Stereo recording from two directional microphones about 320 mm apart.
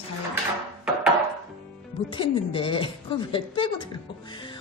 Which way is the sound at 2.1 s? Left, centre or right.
Centre.